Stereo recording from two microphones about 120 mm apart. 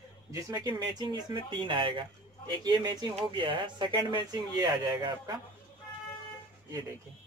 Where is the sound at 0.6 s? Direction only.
35° right (ahead or behind).